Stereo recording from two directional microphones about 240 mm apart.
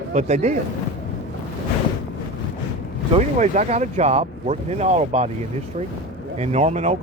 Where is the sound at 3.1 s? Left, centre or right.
Right.